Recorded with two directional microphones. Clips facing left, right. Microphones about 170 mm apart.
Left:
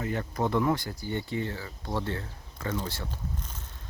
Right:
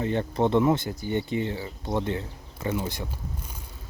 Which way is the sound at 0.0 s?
25° right (ahead or behind).